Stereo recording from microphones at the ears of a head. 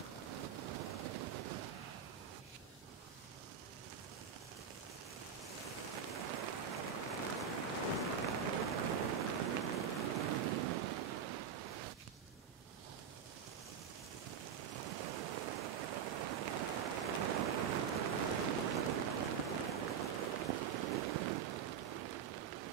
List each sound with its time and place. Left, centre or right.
0.3 s vehicle: right
5.9 s rain on surface: right
8.2 s rain: right
14.6 s a sound: right